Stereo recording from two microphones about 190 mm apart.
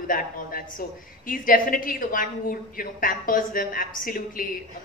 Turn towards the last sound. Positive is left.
turn(degrees=45)  # may be behind; listen again after turning